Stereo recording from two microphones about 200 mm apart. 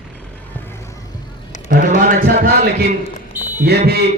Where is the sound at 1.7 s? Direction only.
45° right (ahead or behind).